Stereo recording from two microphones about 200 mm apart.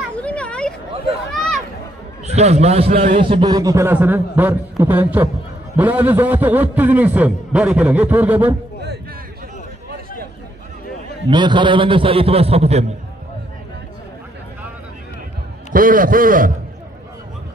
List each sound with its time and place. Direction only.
0.2 s a sound: 5° left (ahead or behind)
2.2 s a man's voice: 35° right (ahead or behind); by 8.5 s 10° right (ahead or behind)
11.2 s a man's voice: 25° right (ahead or behind)
15.7 s a man's voice: 45° right (ahead or behind)